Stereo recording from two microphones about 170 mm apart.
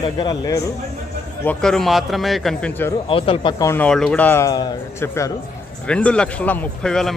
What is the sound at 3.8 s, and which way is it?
A man's voice, 5° left (ahead or behind).